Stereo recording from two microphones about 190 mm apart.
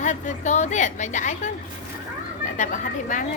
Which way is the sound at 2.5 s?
40° left (ahead or behind).